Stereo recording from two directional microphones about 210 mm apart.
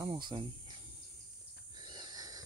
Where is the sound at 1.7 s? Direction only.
20° right (ahead or behind).